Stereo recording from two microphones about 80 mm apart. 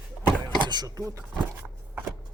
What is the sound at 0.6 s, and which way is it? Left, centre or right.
Speech, right.